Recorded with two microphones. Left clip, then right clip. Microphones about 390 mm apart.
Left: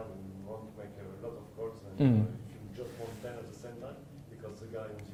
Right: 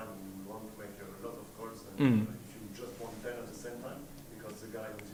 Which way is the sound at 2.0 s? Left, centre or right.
Centre.